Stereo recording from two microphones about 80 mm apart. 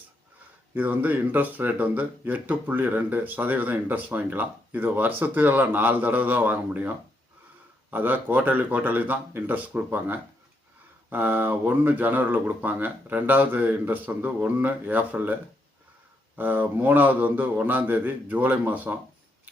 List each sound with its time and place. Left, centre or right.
0.7 s speech: right